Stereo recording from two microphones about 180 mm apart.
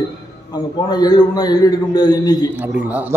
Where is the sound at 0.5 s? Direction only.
20° left (ahead or behind).